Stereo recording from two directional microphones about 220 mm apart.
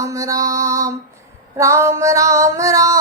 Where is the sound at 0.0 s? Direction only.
15° right (ahead or behind).